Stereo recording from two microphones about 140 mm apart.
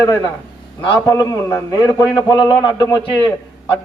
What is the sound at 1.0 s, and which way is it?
A man's voice, 25° left (ahead or behind).